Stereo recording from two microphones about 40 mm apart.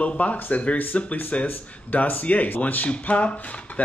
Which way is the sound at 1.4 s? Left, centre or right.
Left.